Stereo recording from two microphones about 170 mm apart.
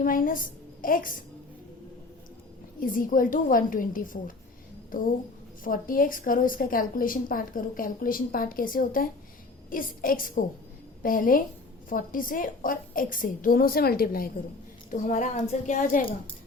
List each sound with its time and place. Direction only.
0.0 s a woman's voice: 55° left (ahead or behind)
2.8 s a woman's voice: 55° left (ahead or behind)
14.8 s a woman's voice: 50° left (ahead or behind)